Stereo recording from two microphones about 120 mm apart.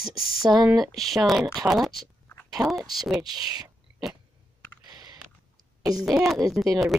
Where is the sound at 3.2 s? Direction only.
35° right (ahead or behind).